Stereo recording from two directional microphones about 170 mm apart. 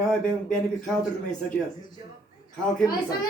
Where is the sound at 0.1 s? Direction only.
5° left (ahead or behind).